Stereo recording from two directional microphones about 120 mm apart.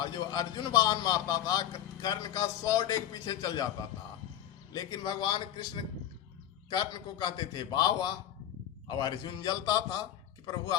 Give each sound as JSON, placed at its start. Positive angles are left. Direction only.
{"t": 0.0, "sound": "a man's voice", "side_deg": 35}
{"t": 4.7, "sound": "a man's voice", "side_deg": 35}